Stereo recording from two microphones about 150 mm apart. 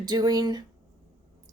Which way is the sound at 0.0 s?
25° right (ahead or behind).